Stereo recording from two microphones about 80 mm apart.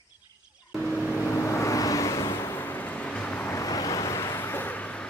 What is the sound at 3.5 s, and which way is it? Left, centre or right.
Vehicle, left.